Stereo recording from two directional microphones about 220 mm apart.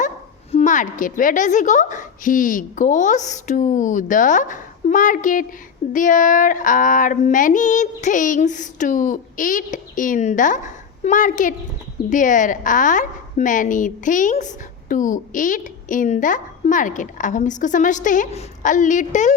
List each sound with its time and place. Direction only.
0.5 s female singing: 35° left (ahead or behind)